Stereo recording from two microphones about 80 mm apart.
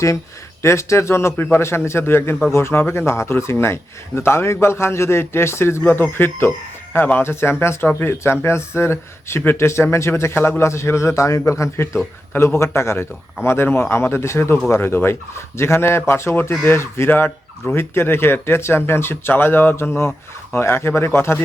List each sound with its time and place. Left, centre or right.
0.6 s a man's voice: left
12.3 s a man's voice: left